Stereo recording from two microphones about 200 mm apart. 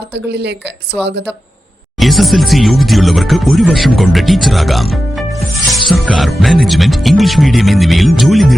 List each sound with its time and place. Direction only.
0.1 s speech: 60° right (ahead or behind)
2.0 s speech: centre (ahead or behind)